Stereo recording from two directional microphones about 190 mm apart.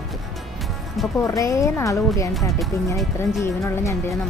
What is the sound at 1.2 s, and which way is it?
Speech, 15° left (ahead or behind).